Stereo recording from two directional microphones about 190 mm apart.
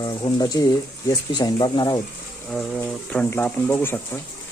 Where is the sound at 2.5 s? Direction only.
5° left (ahead or behind).